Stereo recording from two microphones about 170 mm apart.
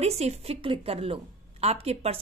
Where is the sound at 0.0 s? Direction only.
40° right (ahead or behind).